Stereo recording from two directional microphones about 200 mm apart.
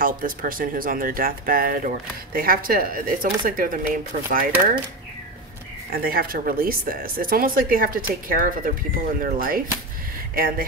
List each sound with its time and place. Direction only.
0.0 s speech: 45° right (ahead or behind)
5.9 s speech: 45° right (ahead or behind)